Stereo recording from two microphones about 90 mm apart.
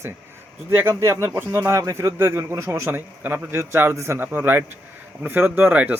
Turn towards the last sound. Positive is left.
turn(degrees=-15)  # may be behind; listen again after turning